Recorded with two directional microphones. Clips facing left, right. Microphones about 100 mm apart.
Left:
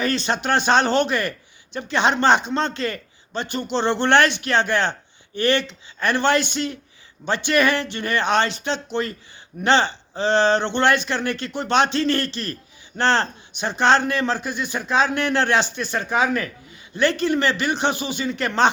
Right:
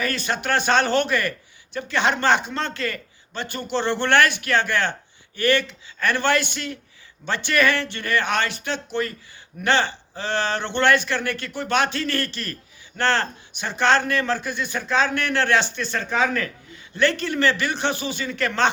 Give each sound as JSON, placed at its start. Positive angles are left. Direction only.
{"t": 0.0, "sound": "a man's voice", "side_deg": 25}